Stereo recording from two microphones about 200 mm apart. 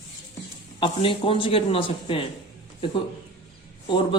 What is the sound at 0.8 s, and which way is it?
Speech, 25° left (ahead or behind).